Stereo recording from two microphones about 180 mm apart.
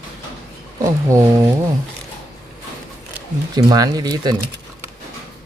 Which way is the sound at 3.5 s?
20° right (ahead or behind).